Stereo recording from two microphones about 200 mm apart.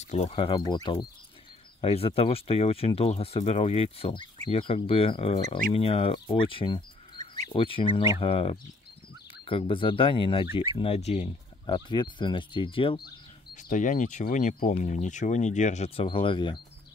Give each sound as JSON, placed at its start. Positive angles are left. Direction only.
{"t": 0.0, "sound": "speech", "side_deg": 30}
{"t": 11.7, "sound": "speech", "side_deg": 20}
{"t": 13.6, "sound": "speech", "side_deg": 40}